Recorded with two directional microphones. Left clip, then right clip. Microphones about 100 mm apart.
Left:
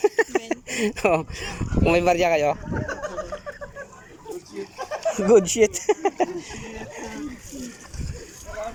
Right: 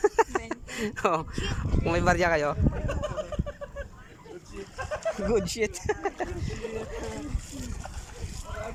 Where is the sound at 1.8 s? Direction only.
5° left (ahead or behind).